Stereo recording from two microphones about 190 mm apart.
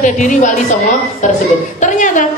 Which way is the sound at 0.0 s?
40° left (ahead or behind).